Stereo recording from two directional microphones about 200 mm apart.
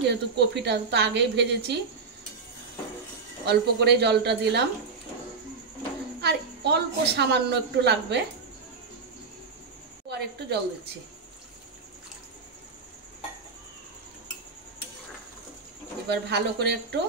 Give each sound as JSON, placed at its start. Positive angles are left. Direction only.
{"t": 0.0, "sound": "a woman's voice", "side_deg": -55}
{"t": 3.4, "sound": "a woman's voice", "side_deg": -55}
{"t": 6.2, "sound": "a woman's voice", "side_deg": -55}
{"t": 10.0, "sound": "a woman's voice", "side_deg": -55}
{"t": 16.1, "sound": "a woman's voice", "side_deg": -55}